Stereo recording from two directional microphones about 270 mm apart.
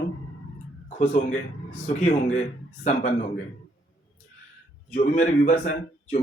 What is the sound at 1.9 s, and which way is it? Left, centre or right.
Speech, left.